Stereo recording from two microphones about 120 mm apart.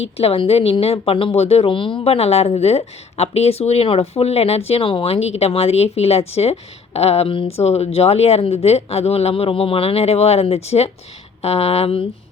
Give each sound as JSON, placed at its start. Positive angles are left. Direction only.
{"t": 0.2, "sound": "speech", "side_deg": 55}